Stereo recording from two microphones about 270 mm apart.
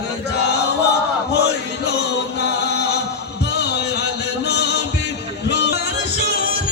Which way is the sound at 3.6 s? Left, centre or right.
Left.